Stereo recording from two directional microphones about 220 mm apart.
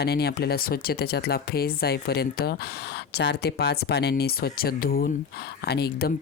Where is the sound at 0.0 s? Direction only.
45° left (ahead or behind).